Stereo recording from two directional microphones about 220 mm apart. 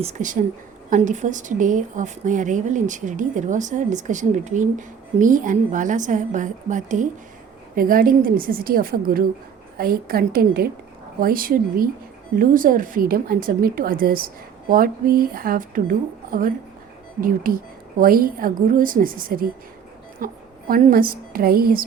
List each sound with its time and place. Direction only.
0.0 s a woman's voice: 35° right (ahead or behind)